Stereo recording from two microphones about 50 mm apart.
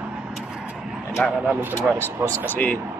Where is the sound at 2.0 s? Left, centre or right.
Left.